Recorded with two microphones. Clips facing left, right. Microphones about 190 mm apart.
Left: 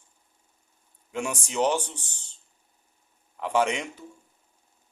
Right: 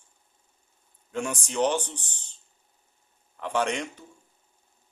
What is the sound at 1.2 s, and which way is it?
Speech, 10° left (ahead or behind).